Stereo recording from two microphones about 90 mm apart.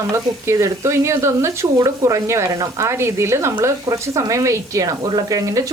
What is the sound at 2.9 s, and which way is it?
Speech, 30° right (ahead or behind).